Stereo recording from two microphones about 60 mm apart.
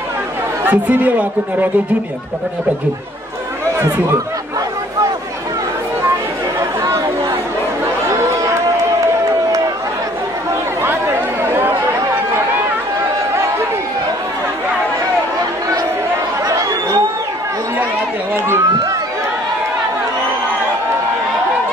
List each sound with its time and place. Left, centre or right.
0.7 s speech: right
10.8 s chatter: right